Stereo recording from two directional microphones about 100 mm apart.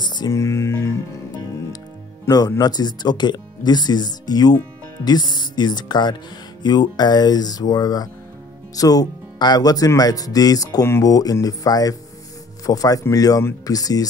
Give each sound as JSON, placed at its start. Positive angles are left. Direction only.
{"t": 0.0, "sound": "music", "side_deg": 45}
{"t": 0.3, "sound": "music", "side_deg": 30}
{"t": 2.2, "sound": "speech", "side_deg": 35}